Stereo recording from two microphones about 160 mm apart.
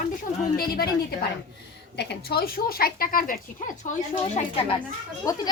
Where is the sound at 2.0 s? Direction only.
75° left (ahead or behind).